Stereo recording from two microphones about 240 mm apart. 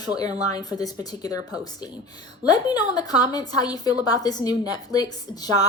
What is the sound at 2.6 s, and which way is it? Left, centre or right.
A woman's voice, centre.